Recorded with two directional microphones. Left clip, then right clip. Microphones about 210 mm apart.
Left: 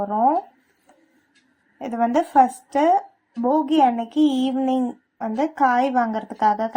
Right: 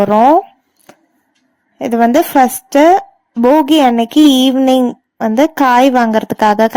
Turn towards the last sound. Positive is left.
turn(degrees=-50)  # may be behind; listen again after turning